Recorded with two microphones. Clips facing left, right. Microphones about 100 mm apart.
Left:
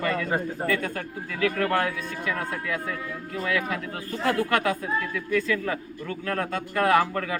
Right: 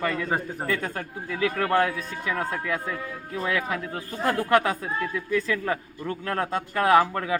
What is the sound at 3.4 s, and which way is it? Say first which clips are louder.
A man's voice: right 1 dB; 25° right (ahead or behind).